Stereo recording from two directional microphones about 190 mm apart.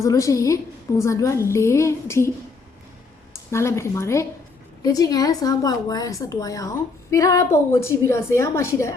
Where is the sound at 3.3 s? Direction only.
15° left (ahead or behind).